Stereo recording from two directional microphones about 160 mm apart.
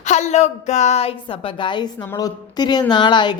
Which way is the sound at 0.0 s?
45° left (ahead or behind).